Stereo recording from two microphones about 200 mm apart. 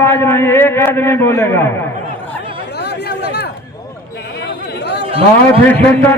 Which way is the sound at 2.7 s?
55° left (ahead or behind).